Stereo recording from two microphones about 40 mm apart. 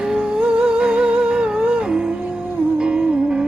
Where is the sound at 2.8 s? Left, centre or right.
Right.